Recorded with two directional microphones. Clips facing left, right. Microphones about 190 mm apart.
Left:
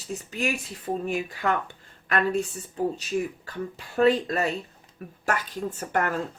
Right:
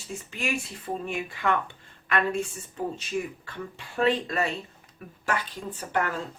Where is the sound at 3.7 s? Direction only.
40° left (ahead or behind).